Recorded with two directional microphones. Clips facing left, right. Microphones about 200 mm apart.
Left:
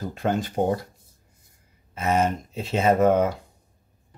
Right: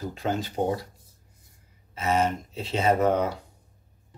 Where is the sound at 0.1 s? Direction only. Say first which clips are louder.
Left 6 dB; 50° left (ahead or behind).